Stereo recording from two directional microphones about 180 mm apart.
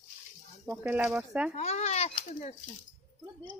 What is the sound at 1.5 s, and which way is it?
A child's voice, 40° left (ahead or behind).